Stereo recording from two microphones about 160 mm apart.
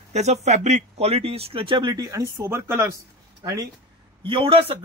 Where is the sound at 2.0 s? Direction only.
20° right (ahead or behind).